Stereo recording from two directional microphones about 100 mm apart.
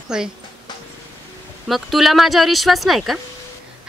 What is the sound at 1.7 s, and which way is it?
A woman's voice, centre (ahead or behind).